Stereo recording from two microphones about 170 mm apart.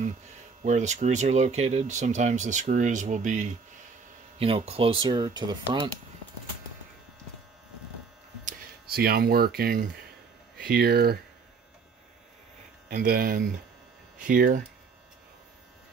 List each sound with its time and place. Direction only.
0.7 s speech: 45° right (ahead or behind)
4.4 s speech: 35° right (ahead or behind)
8.5 s speech: 65° right (ahead or behind)
12.9 s speech: 60° right (ahead or behind)